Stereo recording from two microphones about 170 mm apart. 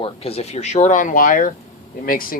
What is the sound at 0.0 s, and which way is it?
Speech, 35° left (ahead or behind).